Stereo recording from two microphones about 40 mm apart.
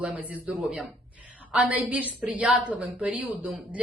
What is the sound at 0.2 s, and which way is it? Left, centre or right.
Speech, right.